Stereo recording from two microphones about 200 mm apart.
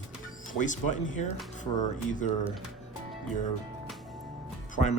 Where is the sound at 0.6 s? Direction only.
40° left (ahead or behind).